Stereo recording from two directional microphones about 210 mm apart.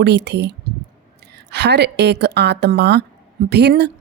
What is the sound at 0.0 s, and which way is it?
A woman's voice, 55° right (ahead or behind).